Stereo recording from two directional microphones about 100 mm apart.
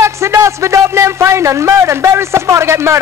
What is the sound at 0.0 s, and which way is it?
A man's voice, 30° right (ahead or behind).